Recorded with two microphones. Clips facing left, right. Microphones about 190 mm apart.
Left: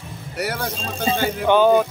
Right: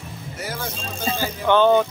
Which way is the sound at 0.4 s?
65° left (ahead or behind).